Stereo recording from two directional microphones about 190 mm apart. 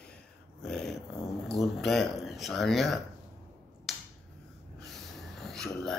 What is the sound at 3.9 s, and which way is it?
Finger snapping, centre (ahead or behind).